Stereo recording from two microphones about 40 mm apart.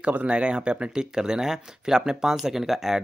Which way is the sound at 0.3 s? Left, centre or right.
Right.